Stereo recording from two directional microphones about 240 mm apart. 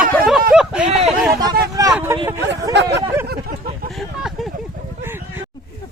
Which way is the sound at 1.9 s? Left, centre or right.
Centre.